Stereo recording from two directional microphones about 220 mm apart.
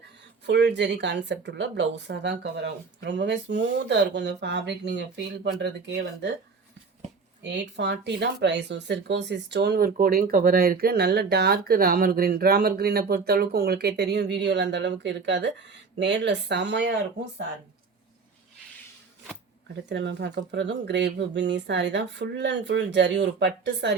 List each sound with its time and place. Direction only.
0.4 s speech: 50° right (ahead or behind)
7.4 s speech: 50° right (ahead or behind)
19.6 s speech: 50° right (ahead or behind)